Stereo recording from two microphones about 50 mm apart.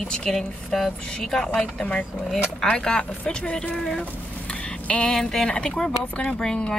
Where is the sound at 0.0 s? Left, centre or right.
Centre.